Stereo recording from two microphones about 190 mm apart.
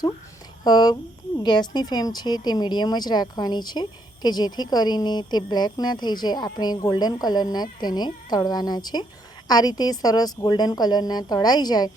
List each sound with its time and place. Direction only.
0.6 s speech: 20° left (ahead or behind)